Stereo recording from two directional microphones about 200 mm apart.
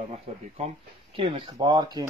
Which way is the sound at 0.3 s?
30° right (ahead or behind).